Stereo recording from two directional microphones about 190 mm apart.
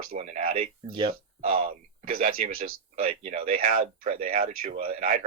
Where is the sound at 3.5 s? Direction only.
50° right (ahead or behind).